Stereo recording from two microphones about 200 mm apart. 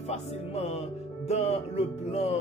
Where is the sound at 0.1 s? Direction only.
30° left (ahead or behind).